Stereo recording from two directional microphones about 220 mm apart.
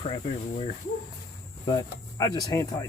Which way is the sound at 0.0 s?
30° left (ahead or behind).